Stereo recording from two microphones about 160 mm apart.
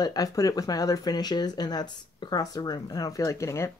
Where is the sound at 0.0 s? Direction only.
25° left (ahead or behind).